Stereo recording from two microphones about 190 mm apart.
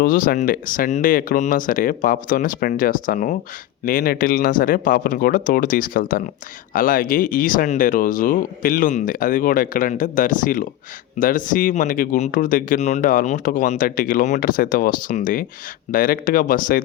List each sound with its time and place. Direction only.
0.0 s speech: 50° left (ahead or behind)